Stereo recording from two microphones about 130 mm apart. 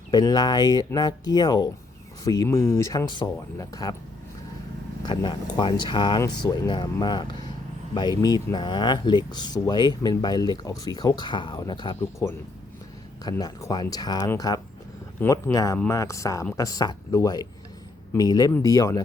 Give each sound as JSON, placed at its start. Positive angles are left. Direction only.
{"t": 0.1, "sound": "speech", "side_deg": 30}
{"t": 5.0, "sound": "speech", "side_deg": 35}
{"t": 13.4, "sound": "speech", "side_deg": 30}